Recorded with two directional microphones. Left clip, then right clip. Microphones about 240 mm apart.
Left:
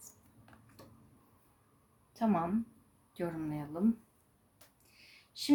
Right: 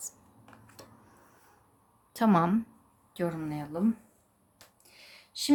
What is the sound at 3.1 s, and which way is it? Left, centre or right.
Speech, centre.